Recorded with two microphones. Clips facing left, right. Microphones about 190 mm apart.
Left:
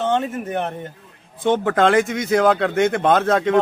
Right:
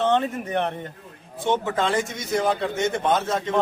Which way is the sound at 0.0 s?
5° left (ahead or behind).